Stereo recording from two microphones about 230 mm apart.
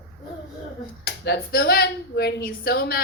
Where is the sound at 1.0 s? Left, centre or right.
Left.